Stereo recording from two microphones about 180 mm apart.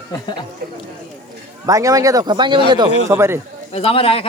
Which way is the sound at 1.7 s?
20° right (ahead or behind).